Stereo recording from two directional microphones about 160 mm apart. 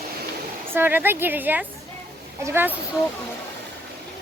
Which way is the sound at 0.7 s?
15° right (ahead or behind).